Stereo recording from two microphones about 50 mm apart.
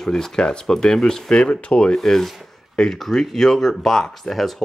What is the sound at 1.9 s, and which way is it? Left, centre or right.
Speech, centre.